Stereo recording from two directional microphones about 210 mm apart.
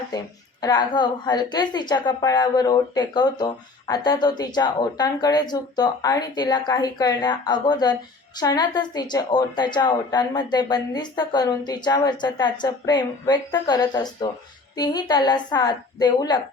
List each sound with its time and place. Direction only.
0.1 s a woman's voice: 20° left (ahead or behind)